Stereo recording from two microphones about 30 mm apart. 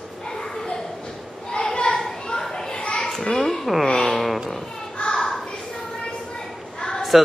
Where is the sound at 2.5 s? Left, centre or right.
Left.